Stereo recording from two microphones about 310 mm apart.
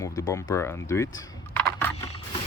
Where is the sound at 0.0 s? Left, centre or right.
Centre.